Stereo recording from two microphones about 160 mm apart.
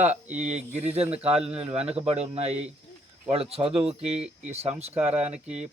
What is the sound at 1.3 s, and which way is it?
Speech, 5° right (ahead or behind).